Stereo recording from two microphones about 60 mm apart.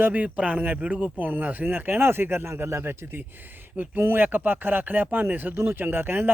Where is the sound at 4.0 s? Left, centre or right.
Right.